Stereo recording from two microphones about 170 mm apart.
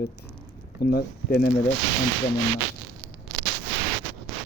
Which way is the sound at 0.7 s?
70° left (ahead or behind).